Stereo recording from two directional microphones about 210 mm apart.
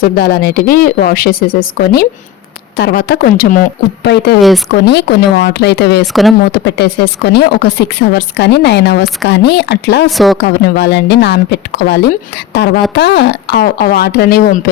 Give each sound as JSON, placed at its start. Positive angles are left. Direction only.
{"t": 0.0, "sound": "a woman's voice", "side_deg": 45}
{"t": 4.0, "sound": "a woman's voice", "side_deg": 55}
{"t": 4.4, "sound": "a woman's voice", "side_deg": 0}
{"t": 4.7, "sound": "a woman's voice", "side_deg": 50}
{"t": 10.1, "sound": "a woman's voice", "side_deg": 0}
{"t": 10.4, "sound": "a woman's voice", "side_deg": 50}